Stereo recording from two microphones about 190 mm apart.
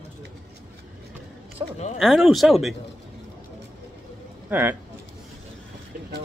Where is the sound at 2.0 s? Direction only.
Centre (ahead or behind).